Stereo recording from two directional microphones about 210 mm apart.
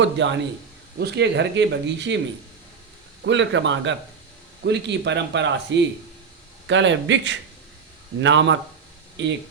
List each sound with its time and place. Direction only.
0.0 s speech: 60° right (ahead or behind)
3.2 s speech: 60° right (ahead or behind)